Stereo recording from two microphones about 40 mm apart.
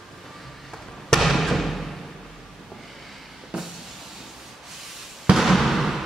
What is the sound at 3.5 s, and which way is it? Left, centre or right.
Vehicle, right.